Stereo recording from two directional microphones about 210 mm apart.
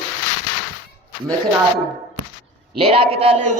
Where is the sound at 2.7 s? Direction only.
25° right (ahead or behind).